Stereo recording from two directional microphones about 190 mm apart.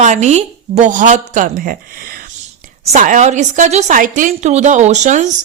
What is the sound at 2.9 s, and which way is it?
A woman's voice, 40° right (ahead or behind).